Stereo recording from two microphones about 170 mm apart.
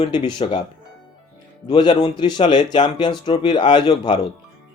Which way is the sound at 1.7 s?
30° left (ahead or behind).